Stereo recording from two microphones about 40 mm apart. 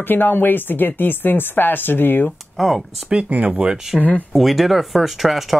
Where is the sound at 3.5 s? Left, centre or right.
Right.